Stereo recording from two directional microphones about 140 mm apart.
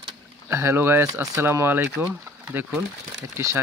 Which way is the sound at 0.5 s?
20° right (ahead or behind).